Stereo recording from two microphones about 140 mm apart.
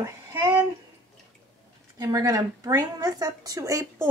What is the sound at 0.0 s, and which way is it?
Speech, 15° right (ahead or behind).